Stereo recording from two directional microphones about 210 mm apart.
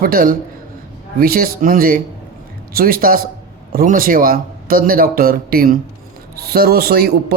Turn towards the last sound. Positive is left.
turn(degrees=-50)  # may be behind; listen again after turning